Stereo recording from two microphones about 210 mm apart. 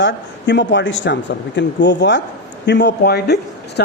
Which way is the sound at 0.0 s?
55° left (ahead or behind).